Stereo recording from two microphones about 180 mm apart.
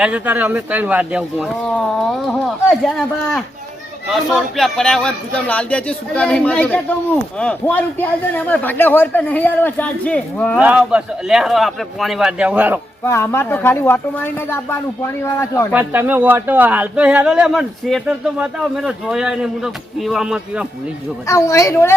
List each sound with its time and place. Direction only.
0.0 s speech: 10° right (ahead or behind); by 10.6 s 10° left (ahead or behind)
10.6 s speech: 5° right (ahead or behind)
13.1 s speech: 15° left (ahead or behind)
15.7 s speech: 10° right (ahead or behind)
21.2 s speech: 15° left (ahead or behind)